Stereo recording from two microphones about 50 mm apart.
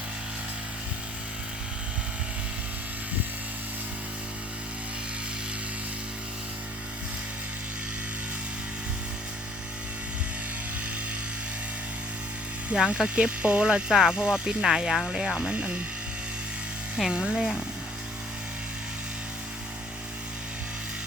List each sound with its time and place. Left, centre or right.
12.9 s speech: right
17.0 s speech: centre